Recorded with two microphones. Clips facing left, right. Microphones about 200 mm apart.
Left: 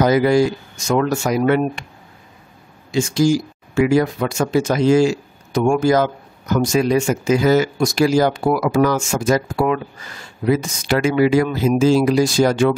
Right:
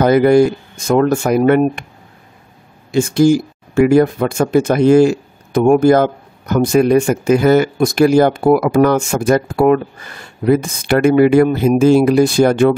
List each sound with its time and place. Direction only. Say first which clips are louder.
0.0 s speech: right 5 dB; 55° right (ahead or behind)
2.9 s speech: right 5 dB; 55° right (ahead or behind)